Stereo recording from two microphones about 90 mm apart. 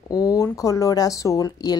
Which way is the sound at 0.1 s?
45° left (ahead or behind).